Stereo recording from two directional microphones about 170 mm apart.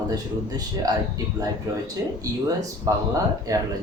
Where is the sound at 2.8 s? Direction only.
20° right (ahead or behind).